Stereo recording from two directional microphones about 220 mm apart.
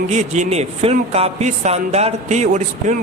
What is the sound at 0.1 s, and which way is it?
Speech, 30° right (ahead or behind).